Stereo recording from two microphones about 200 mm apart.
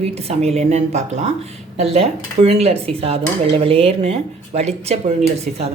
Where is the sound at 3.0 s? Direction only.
30° right (ahead or behind).